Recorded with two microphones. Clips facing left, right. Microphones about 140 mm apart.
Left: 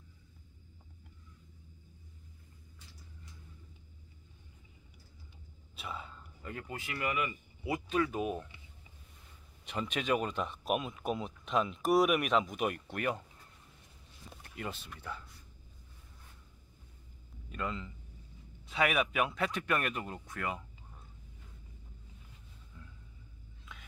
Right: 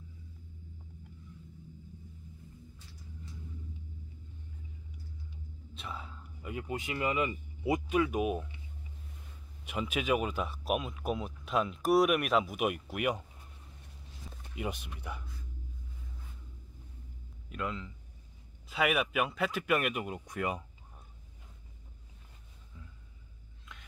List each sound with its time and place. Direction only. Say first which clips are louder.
5.8 s speech: even; centre (ahead or behind); by 7.8 s 25° right (ahead or behind)
7.9 s speech: right 1 dB; 10° right (ahead or behind)
9.7 s speech: right 2 dB; 5° right (ahead or behind)
14.4 s speech: right 4 dB; 15° right (ahead or behind)
17.5 s speech: right 1 dB; 5° right (ahead or behind)